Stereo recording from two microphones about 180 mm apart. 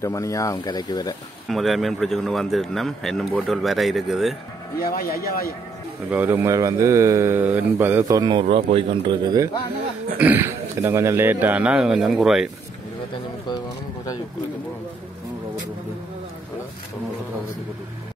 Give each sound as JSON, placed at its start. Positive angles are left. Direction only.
{"t": 0.0, "sound": "speech", "side_deg": 15}
{"t": 1.5, "sound": "speech", "side_deg": 0}
{"t": 4.7, "sound": "speech", "side_deg": 55}
{"t": 6.0, "sound": "speech", "side_deg": -10}
{"t": 10.1, "sound": "speech", "side_deg": -10}